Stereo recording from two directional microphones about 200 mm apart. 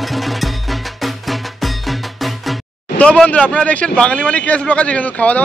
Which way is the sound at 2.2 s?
5° left (ahead or behind).